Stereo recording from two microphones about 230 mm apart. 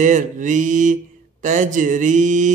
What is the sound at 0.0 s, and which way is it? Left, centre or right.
Mantra, right.